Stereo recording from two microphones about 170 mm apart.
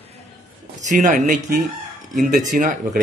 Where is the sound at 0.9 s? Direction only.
45° right (ahead or behind).